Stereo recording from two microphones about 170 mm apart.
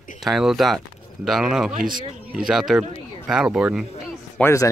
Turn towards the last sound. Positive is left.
turn(degrees=15)  # may be behind; listen again after turning